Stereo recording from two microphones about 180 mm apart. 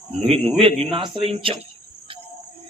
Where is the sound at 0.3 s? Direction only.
30° right (ahead or behind).